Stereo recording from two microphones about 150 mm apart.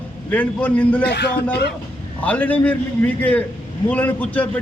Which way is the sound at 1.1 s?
90° left.